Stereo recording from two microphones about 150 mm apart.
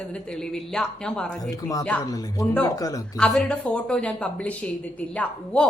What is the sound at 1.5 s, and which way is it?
Speech, 20° left (ahead or behind).